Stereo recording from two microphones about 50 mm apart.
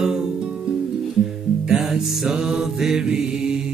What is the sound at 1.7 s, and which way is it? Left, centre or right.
Music, centre.